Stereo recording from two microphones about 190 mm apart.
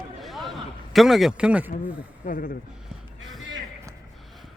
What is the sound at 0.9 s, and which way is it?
Speech, centre (ahead or behind).